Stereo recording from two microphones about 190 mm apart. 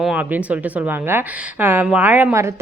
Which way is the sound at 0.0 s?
5° right (ahead or behind).